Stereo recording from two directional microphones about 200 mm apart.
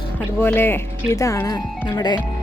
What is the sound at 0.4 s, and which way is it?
Speech, 10° left (ahead or behind).